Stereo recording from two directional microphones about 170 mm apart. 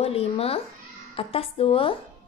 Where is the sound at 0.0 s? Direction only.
35° left (ahead or behind).